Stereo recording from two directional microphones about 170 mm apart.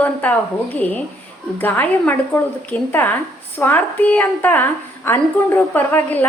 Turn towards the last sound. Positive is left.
turn(degrees=10)  # may be behind; listen again after turning